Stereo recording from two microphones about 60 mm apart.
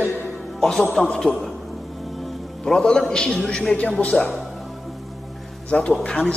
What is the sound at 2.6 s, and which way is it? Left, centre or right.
A man's voice, centre.